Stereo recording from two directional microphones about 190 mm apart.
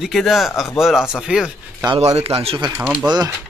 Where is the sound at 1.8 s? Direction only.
25° right (ahead or behind).